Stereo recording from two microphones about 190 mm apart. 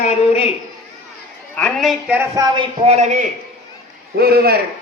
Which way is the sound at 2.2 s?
20° right (ahead or behind).